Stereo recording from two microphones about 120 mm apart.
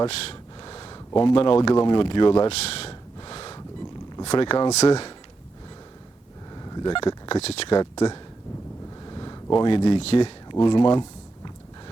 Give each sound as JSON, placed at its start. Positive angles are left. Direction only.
{"t": 0.6, "sound": "speech", "side_deg": 40}
{"t": 3.2, "sound": "snort", "side_deg": 45}
{"t": 4.3, "sound": "speech", "side_deg": 50}
{"t": 6.5, "sound": "a sound", "side_deg": 35}
{"t": 7.7, "sound": "speech", "side_deg": 30}
{"t": 9.0, "sound": "a sound", "side_deg": 35}
{"t": 10.0, "sound": "speech", "side_deg": 55}